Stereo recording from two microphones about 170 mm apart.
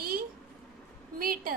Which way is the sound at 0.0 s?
60° right (ahead or behind).